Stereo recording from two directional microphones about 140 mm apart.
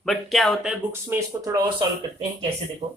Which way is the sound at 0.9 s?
20° right (ahead or behind).